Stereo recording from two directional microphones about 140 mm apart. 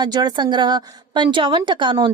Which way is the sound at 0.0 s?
30° right (ahead or behind).